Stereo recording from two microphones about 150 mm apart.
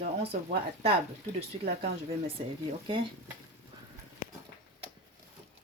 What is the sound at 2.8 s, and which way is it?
Speech, 35° right (ahead or behind).